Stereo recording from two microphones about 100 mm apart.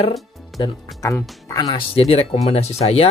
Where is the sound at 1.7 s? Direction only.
75° left (ahead or behind).